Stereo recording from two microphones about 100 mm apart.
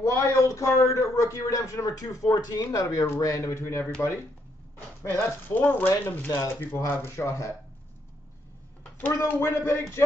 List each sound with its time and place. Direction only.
0.0 s a man's voice: 30° left (ahead or behind)
5.0 s speech: 20° left (ahead or behind)
9.2 s speech: 30° left (ahead or behind)